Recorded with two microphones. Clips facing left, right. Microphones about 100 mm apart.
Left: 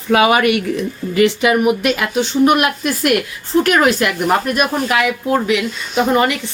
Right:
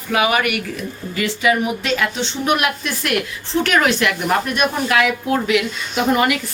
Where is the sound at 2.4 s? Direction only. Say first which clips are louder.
Left 3 dB; 45° left (ahead or behind).